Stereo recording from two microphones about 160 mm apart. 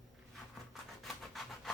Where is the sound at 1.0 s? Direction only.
Centre (ahead or behind).